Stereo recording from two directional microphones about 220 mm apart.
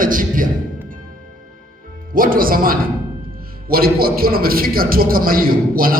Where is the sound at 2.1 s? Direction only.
40° right (ahead or behind).